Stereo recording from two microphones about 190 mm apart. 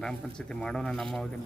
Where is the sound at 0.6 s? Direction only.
Centre (ahead or behind).